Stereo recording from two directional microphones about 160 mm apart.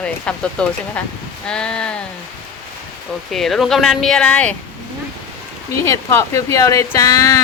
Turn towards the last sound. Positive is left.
turn(degrees=20)  # may be behind; listen again after turning